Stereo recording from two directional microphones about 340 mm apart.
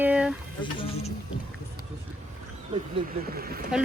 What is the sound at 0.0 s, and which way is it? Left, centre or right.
Vehicle, centre.